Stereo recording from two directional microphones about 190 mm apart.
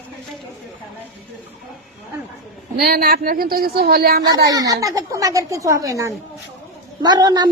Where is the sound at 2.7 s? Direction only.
50° right (ahead or behind).